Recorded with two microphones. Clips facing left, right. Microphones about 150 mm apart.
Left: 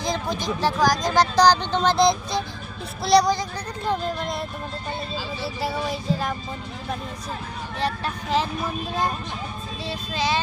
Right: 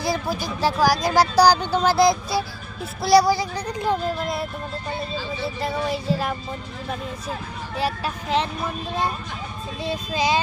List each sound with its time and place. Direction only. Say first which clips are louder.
0.0 s speech: right 1 dB; 10° right (ahead or behind)
3.0 s child singing: right 2 dB; 5° right (ahead or behind)
7.8 s child singing: right 1 dB; 5° right (ahead or behind)
9.8 s speech: right 3 dB; 20° right (ahead or behind)